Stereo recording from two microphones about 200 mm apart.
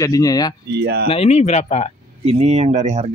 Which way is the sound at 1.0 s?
30° left (ahead or behind).